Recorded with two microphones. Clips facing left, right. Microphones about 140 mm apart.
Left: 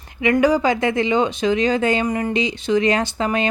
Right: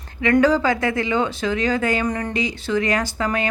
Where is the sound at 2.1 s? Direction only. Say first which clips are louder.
Left 3 dB; 10° left (ahead or behind).